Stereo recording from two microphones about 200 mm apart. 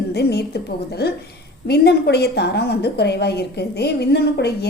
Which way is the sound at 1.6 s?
55° left (ahead or behind).